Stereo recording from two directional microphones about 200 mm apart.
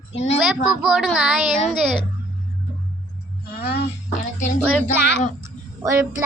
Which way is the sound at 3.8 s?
35° left (ahead or behind).